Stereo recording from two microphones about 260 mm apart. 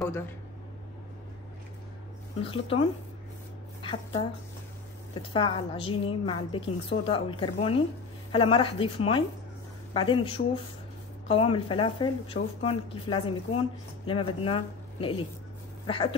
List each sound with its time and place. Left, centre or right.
2.4 s speech: left